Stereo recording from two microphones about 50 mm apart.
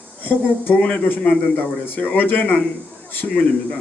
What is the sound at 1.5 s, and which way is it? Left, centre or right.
Speech, left.